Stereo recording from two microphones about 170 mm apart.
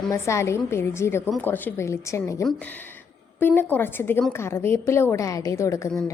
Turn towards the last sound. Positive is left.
turn(degrees=15)  # may be behind; listen again after turning